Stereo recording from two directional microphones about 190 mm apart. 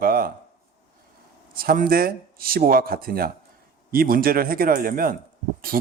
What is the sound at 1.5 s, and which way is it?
Speech, 50° right (ahead or behind).